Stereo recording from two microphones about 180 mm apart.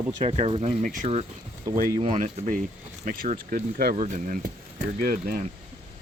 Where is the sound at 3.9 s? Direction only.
45° right (ahead or behind).